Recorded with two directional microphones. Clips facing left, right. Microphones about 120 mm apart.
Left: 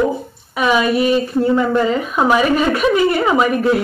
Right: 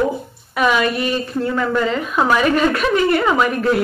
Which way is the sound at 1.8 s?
10° left (ahead or behind).